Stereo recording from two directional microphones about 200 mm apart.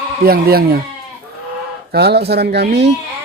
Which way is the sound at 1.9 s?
55° right (ahead or behind).